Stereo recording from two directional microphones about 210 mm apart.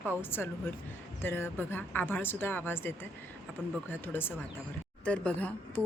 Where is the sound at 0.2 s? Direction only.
10° left (ahead or behind).